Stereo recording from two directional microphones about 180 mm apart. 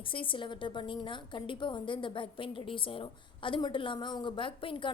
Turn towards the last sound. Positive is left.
turn(degrees=30)  # may be behind; listen again after turning